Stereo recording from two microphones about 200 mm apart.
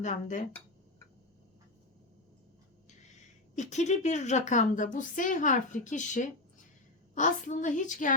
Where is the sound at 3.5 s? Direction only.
35° left (ahead or behind).